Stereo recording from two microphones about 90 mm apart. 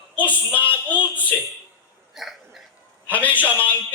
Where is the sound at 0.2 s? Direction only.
15° left (ahead or behind).